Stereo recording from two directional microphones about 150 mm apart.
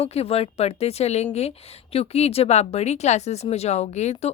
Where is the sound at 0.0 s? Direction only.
40° left (ahead or behind).